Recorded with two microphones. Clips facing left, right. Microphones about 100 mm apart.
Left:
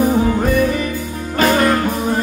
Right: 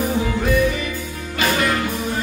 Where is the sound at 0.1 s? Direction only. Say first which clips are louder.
Left 4 dB; 40° left (ahead or behind).